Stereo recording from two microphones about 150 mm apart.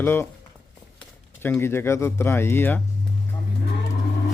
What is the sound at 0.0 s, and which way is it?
Speech, 15° left (ahead or behind).